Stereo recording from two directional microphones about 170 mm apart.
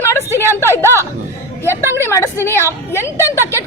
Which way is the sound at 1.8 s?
15° right (ahead or behind).